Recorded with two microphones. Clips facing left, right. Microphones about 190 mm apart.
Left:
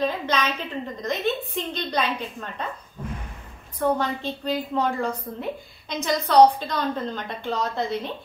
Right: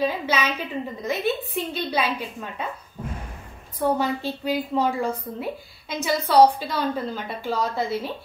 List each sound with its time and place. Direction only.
0.0 s a woman's voice: 10° right (ahead or behind)
3.8 s a woman's voice: 10° right (ahead or behind)